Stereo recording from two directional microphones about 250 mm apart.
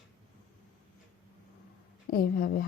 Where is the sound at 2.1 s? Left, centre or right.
Left.